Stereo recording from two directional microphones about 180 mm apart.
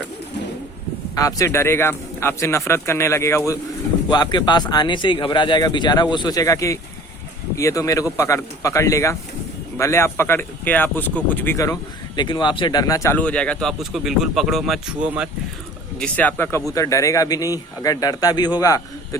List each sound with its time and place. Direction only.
1.1 s speech: 20° left (ahead or behind); by 15.3 s 5° right (ahead or behind)
16.0 s speech: 10° left (ahead or behind)